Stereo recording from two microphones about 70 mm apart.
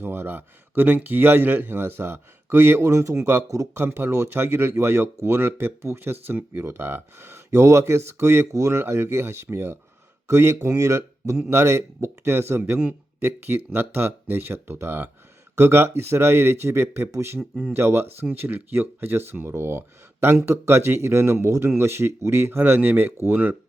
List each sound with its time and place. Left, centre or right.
0.0 s speech: right